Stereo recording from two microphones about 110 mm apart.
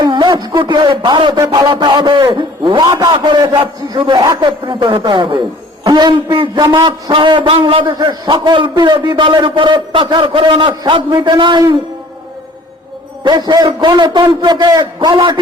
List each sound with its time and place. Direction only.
0.0 s a sound: 40° right (ahead or behind)
0.6 s a man's voice: 45° right (ahead or behind)
13.2 s a man's voice: 40° right (ahead or behind)